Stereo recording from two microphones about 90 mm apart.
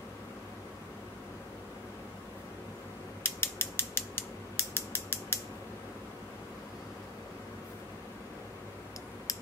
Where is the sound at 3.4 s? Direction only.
25° left (ahead or behind).